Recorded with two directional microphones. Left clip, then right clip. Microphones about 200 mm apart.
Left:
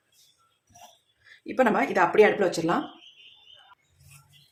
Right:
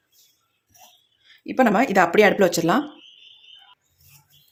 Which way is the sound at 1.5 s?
35° right (ahead or behind).